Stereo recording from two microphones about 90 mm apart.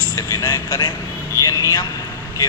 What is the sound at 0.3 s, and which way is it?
Speech, 50° left (ahead or behind).